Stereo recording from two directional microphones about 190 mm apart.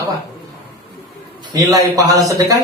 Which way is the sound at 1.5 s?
20° right (ahead or behind).